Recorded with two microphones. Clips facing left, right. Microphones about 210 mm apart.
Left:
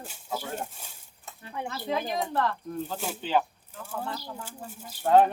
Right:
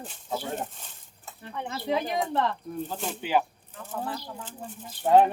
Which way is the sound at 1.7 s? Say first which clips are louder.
Right 3 dB; 20° right (ahead or behind).